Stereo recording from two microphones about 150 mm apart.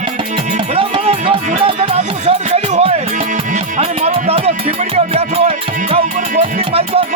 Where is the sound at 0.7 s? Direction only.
40° right (ahead or behind).